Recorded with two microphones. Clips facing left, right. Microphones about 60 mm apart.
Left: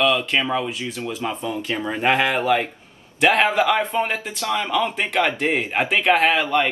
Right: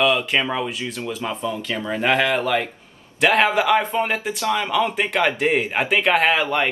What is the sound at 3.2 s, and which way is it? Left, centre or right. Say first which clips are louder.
A man's voice: even; centre.